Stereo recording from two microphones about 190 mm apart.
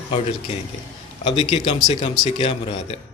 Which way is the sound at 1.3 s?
30° left (ahead or behind).